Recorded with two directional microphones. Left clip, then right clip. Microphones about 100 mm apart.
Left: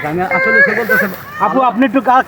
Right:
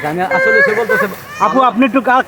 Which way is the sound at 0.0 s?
35° right (ahead or behind).